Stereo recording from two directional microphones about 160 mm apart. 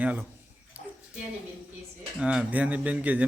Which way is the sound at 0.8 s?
60° left (ahead or behind).